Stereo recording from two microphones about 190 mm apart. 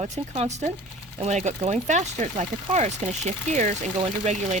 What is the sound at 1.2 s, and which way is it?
Speech, 40° right (ahead or behind).